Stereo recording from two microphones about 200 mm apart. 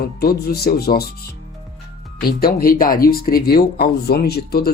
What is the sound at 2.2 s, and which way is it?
Speech, 50° left (ahead or behind).